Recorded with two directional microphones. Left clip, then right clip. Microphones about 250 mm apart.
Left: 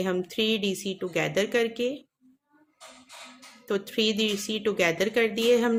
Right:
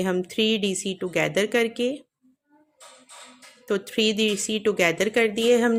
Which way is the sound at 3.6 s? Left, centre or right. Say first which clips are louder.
Right 3 dB; centre.